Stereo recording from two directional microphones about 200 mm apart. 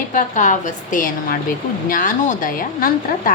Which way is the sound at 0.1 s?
40° left (ahead or behind).